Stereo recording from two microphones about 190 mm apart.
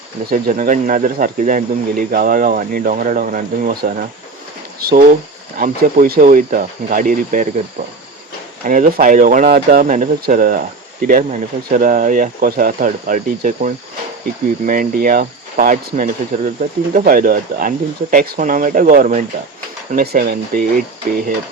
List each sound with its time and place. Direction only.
0.3 s speech: 50° right (ahead or behind)
8.6 s speech: 45° right (ahead or behind)